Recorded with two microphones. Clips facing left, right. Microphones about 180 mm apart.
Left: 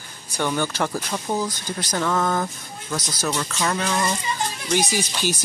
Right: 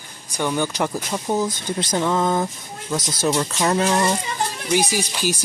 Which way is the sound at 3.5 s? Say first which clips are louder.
Right 5 dB; 35° right (ahead or behind).